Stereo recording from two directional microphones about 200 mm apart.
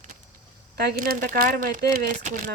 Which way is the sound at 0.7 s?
55° right (ahead or behind).